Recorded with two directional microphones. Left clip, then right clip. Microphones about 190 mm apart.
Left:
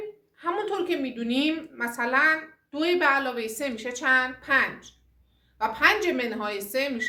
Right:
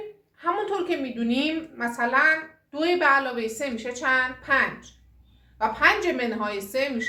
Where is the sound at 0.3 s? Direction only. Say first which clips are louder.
Right 2 dB; 20° left (ahead or behind).